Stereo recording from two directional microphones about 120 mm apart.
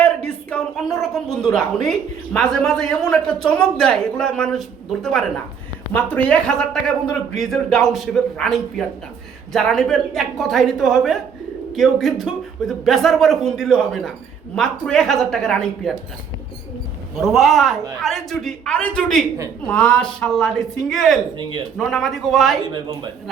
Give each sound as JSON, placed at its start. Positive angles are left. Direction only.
{"t": 0.5, "sound": "a woman's voice", "side_deg": 5}
{"t": 5.9, "sound": "a woman's voice", "side_deg": 15}
{"t": 17.2, "sound": "a woman's voice", "side_deg": 0}